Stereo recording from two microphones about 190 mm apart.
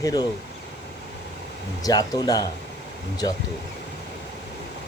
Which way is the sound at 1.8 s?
20° left (ahead or behind).